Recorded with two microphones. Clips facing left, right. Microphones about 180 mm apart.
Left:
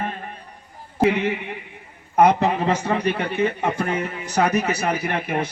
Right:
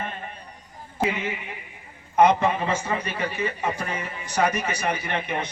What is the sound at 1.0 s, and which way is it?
Speech, 65° left (ahead or behind).